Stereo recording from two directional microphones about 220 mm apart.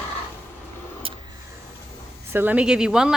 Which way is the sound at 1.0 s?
25° right (ahead or behind).